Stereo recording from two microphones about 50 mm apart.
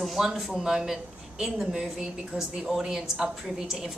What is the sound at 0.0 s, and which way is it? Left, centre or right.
A woman's voice, centre.